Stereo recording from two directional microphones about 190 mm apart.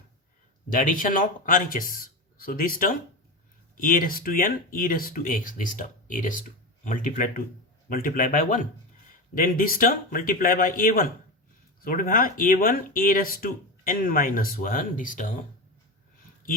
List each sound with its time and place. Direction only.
0.7 s speech: 45° left (ahead or behind)